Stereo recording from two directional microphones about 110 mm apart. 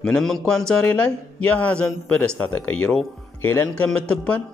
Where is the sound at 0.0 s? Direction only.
5° left (ahead or behind).